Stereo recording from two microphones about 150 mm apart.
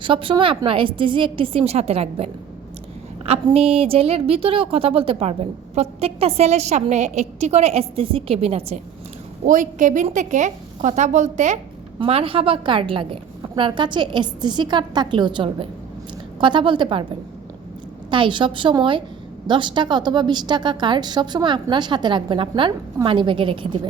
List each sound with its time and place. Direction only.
0.0 s a woman's voice: 35° right (ahead or behind)
3.5 s a woman's voice: 40° right (ahead or behind)
9.5 s a woman's voice: 55° right (ahead or behind)
11.9 s a woman's voice: 40° right (ahead or behind)
18.1 s a woman's voice: 35° right (ahead or behind)